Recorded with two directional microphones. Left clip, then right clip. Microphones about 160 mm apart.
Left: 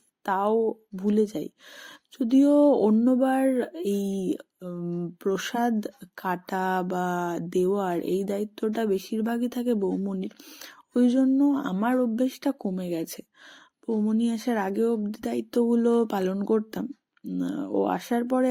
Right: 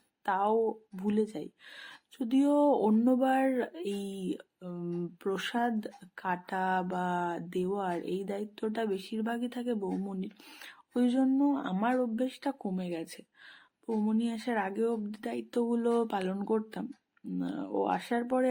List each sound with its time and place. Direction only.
0.3 s speech: 35° left (ahead or behind)